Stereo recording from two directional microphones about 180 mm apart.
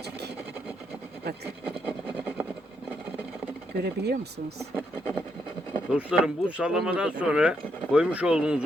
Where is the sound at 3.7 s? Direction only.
65° right (ahead or behind).